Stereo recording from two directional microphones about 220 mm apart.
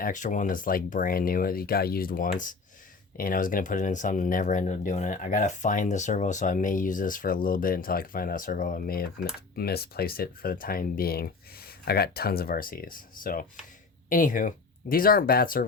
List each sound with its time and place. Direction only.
0.0 s speech: 35° left (ahead or behind)